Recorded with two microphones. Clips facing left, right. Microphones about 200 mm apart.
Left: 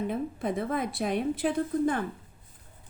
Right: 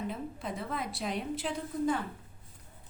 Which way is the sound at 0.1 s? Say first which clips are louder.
Left 8 dB; 55° left (ahead or behind).